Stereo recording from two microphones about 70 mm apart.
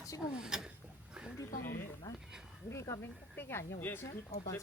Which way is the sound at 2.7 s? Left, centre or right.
Left.